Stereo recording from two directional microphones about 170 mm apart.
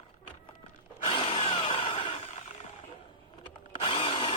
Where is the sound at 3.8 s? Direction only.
30° left (ahead or behind).